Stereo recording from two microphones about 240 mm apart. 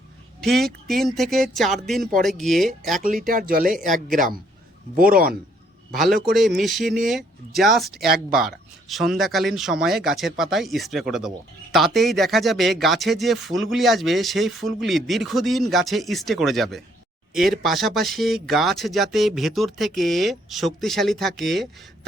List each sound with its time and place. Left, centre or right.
0.4 s speech: centre
3.2 s speech: right
5.9 s speech: centre